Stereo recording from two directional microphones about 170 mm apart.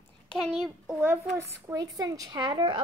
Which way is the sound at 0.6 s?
5° right (ahead or behind).